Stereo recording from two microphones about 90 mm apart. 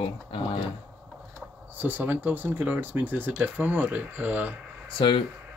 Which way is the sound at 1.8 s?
20° right (ahead or behind).